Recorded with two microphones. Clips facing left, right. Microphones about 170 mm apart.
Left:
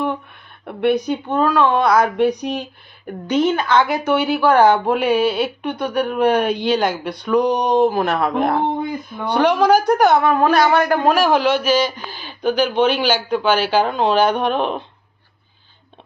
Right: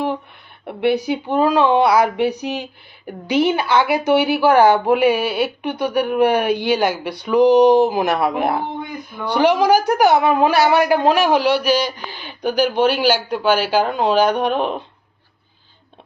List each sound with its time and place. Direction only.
0.9 s speech: 10° right (ahead or behind)
11.0 s a man's voice: 20° right (ahead or behind)